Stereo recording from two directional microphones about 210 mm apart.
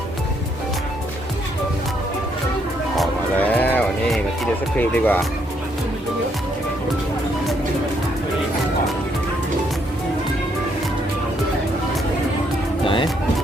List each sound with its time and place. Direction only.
3.0 s music: 5° left (ahead or behind)
4.8 s speech: 10° left (ahead or behind)
12.8 s music: 25° left (ahead or behind)